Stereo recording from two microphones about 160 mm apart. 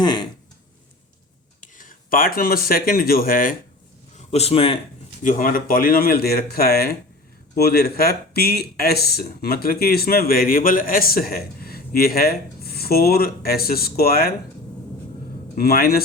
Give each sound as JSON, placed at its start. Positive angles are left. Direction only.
{"t": 0.0, "sound": "a sound", "side_deg": 30}
{"t": 1.6, "sound": "speech", "side_deg": 55}
{"t": 4.2, "sound": "a man's voice", "side_deg": 40}
{"t": 5.2, "sound": "speech", "side_deg": 55}
{"t": 15.5, "sound": "speech", "side_deg": 70}